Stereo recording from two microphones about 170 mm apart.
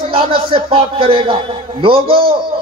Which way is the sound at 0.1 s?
30° right (ahead or behind).